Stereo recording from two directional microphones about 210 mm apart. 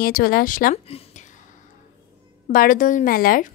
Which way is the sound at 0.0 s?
45° left (ahead or behind).